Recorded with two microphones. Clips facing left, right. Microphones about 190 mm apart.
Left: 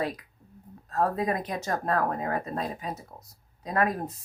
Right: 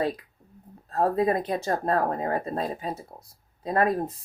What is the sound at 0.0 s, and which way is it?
Speech, 30° right (ahead or behind).